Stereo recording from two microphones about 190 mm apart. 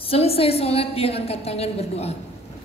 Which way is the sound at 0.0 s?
30° left (ahead or behind).